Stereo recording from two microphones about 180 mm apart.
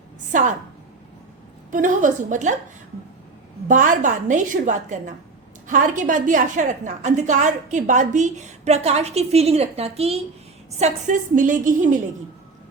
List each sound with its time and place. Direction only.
0.3 s a woman's voice: 45° right (ahead or behind)
1.7 s a woman's voice: 45° right (ahead or behind)
3.7 s a woman's voice: 45° right (ahead or behind)